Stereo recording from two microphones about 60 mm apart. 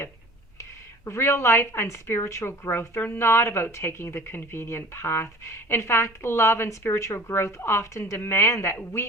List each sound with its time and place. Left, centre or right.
0.6 s a woman's voice: left